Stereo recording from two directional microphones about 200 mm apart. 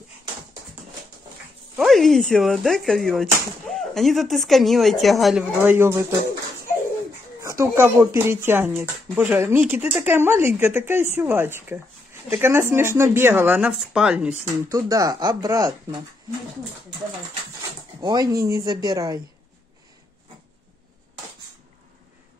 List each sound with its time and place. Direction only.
1.8 s speech: centre (ahead or behind)
5.6 s speech: 10° right (ahead or behind)
7.4 s speech: 15° right (ahead or behind)
18.0 s speech: 20° right (ahead or behind)